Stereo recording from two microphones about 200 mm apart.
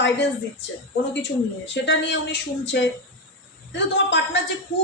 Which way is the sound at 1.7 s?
60° left (ahead or behind).